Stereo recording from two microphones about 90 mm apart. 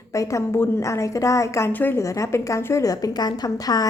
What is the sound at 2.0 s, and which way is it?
A woman's voice, 35° left (ahead or behind).